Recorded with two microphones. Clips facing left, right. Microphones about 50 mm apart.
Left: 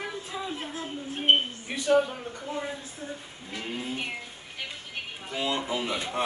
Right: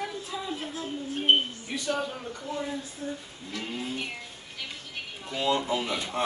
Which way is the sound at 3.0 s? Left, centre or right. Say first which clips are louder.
Right 2 dB; left.